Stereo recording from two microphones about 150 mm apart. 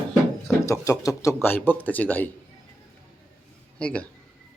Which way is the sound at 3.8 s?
10° left (ahead or behind).